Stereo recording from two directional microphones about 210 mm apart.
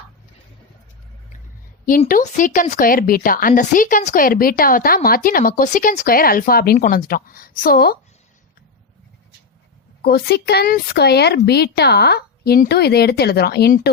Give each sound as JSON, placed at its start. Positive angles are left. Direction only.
{"t": 2.0, "sound": "a woman's voice", "side_deg": 40}
{"t": 10.0, "sound": "a woman's voice", "side_deg": 50}